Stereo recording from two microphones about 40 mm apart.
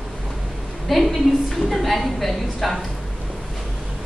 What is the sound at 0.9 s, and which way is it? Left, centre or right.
A woman's voice, centre.